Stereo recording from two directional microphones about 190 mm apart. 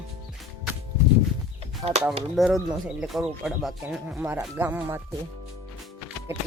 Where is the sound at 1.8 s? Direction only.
20° right (ahead or behind).